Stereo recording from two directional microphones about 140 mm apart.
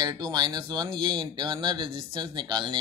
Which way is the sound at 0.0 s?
30° right (ahead or behind).